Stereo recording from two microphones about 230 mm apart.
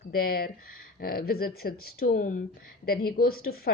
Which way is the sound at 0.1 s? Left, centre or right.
Left.